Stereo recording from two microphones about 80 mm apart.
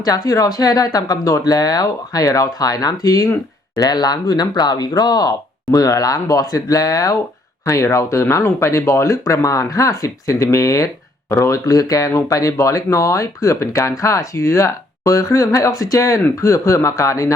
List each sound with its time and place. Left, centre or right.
0.0 s speech: left